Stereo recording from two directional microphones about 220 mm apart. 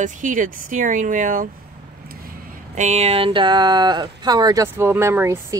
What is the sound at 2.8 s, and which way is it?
Speech, 30° right (ahead or behind).